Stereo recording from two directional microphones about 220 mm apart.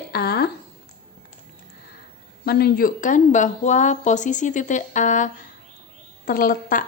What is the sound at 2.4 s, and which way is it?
A woman's voice, 45° left (ahead or behind).